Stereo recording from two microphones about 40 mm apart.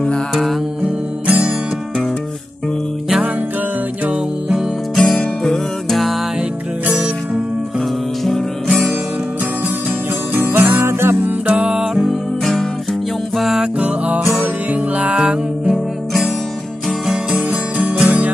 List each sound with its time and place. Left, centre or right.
0.3 s music: centre
1.2 s music: right
4.9 s music: centre
8.2 s music: centre
10.3 s music: right
11.9 s music: centre
13.6 s music: right
15.1 s music: right
15.7 s music: centre
17.7 s music: right